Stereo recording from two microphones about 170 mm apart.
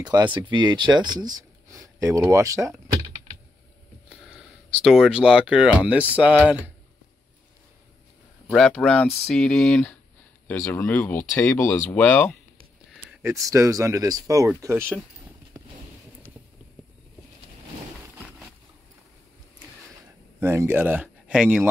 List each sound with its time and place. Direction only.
0.0 s speech: 25° right (ahead or behind)
4.1 s speech: 5° right (ahead or behind)
8.5 s speech: centre (ahead or behind)
13.2 s speech: 20° right (ahead or behind)
20.3 s speech: 15° right (ahead or behind)